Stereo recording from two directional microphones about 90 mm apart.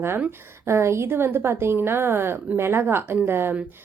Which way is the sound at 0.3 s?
30° right (ahead or behind).